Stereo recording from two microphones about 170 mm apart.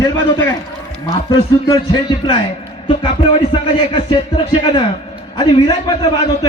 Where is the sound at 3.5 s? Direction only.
25° left (ahead or behind).